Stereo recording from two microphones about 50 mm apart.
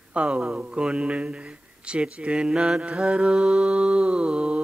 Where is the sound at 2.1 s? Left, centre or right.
Centre.